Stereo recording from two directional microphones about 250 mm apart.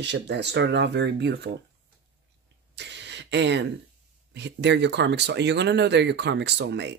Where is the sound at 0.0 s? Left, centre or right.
Right.